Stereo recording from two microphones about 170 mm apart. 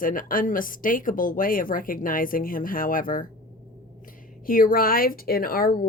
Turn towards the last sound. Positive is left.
turn(degrees=60)  # may be behind; listen again after turning